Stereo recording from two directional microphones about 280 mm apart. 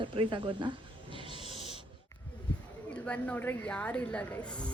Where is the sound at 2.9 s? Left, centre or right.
Centre.